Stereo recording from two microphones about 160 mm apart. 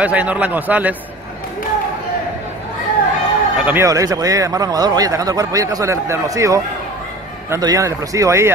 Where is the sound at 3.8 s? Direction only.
20° right (ahead or behind).